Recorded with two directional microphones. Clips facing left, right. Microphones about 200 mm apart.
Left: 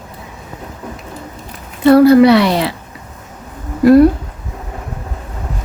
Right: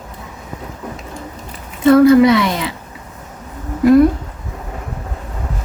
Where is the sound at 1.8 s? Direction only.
35° left (ahead or behind).